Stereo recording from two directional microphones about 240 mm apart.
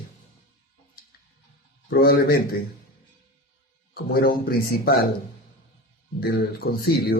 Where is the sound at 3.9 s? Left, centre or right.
Left.